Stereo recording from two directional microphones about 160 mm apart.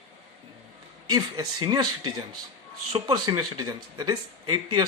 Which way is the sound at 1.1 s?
25° right (ahead or behind).